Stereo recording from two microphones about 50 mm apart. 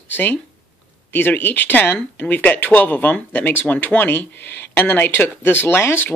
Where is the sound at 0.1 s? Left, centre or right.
Left.